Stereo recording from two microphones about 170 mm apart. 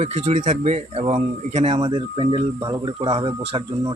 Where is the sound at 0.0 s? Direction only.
40° right (ahead or behind).